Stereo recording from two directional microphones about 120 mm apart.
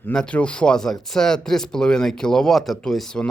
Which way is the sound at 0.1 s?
10° left (ahead or behind).